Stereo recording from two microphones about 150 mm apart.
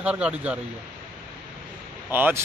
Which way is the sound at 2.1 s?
15° right (ahead or behind).